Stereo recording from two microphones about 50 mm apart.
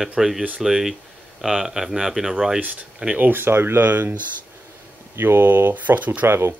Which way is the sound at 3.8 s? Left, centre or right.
Right.